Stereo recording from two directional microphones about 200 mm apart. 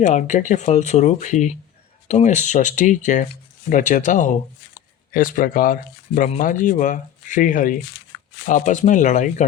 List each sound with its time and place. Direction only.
0.0 s speech: 40° left (ahead or behind)